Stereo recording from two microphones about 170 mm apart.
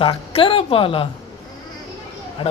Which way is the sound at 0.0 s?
30° left (ahead or behind).